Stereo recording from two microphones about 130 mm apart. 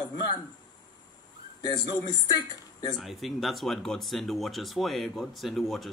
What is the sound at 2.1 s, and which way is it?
Speech, 35° left (ahead or behind).